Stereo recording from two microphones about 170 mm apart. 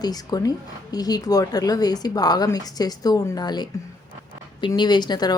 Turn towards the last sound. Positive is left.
turn(degrees=25)  # may be behind; listen again after turning